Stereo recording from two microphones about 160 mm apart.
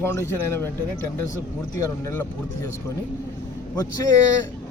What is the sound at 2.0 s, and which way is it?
Speech, 15° left (ahead or behind).